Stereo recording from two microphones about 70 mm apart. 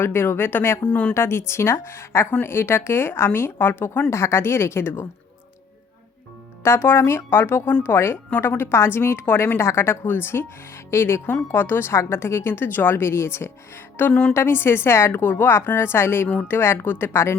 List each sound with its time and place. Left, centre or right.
0.0 s a woman's voice: left
0.9 s a woman's voice: centre
1.1 s a woman's voice: left
6.6 s a woman's voice: left
14.1 s a woman's voice: centre
14.3 s a woman's voice: left